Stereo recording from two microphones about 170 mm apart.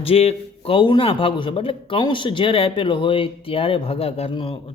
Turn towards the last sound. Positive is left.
turn(degrees=35)  # may be behind; listen again after turning